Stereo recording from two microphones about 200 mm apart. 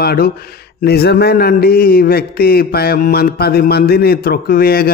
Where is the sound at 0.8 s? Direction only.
55° left (ahead or behind).